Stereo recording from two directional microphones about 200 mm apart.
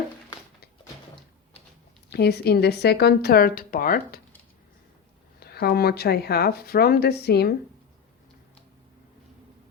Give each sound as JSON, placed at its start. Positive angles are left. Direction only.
{"t": 2.0, "sound": "speech", "side_deg": 55}
{"t": 5.4, "sound": "speech", "side_deg": 50}